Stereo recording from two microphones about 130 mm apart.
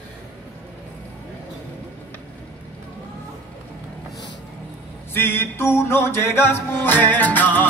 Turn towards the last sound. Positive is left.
turn(degrees=15)  # may be behind; listen again after turning